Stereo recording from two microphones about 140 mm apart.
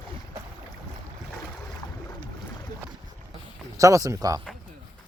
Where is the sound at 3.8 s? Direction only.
25° right (ahead or behind).